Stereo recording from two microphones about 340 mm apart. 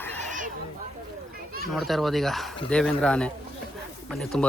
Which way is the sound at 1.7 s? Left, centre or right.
Centre.